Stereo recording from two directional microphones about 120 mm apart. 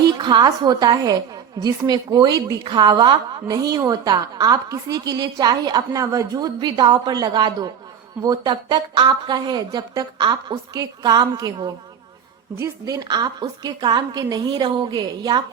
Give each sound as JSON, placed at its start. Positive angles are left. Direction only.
{"t": 0.1, "sound": "a woman's voice", "side_deg": -40}